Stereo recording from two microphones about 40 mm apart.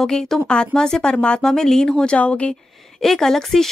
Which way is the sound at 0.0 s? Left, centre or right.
Centre.